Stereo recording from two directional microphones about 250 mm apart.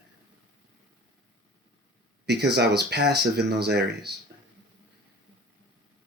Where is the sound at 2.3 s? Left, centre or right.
Right.